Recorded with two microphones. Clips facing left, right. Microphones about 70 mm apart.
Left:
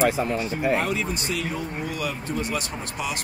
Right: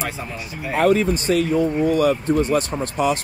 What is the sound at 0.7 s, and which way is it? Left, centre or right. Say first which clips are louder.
Speech: right 9 dB; right.